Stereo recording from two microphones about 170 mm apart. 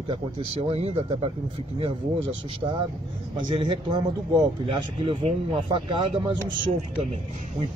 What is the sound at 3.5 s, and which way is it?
Speech, 30° right (ahead or behind).